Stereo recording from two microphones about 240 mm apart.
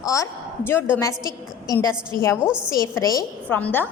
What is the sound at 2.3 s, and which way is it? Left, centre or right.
Speech, centre.